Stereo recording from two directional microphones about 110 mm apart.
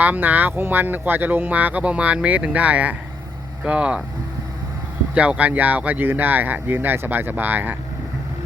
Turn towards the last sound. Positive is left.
turn(degrees=-15)  # may be behind; listen again after turning